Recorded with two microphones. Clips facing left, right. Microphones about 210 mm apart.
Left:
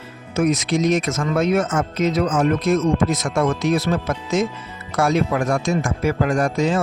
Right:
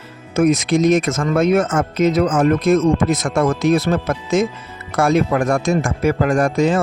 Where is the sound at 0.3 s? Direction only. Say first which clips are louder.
Right 4 dB; 50° right (ahead or behind).